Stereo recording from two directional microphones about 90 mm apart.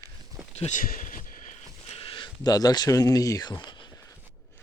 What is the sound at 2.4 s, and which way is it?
Speech, 45° left (ahead or behind).